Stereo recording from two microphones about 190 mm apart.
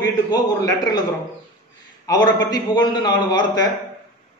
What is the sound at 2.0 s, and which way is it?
A man's voice, 20° left (ahead or behind).